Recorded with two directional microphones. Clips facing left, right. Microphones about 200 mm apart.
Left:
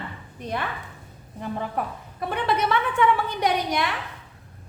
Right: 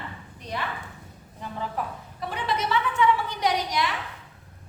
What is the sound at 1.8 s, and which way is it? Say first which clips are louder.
A woman's voice: left 3 dB; 55° left (ahead or behind).